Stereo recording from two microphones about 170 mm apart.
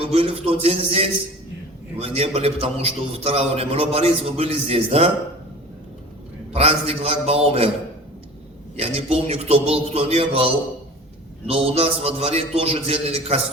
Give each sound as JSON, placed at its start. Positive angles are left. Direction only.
{"t": 0.0, "sound": "a man's voice", "side_deg": -35}
{"t": 6.5, "sound": "a man's voice", "side_deg": -35}
{"t": 8.8, "sound": "a man's voice", "side_deg": -35}